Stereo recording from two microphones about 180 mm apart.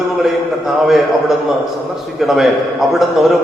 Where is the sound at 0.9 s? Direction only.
Centre (ahead or behind).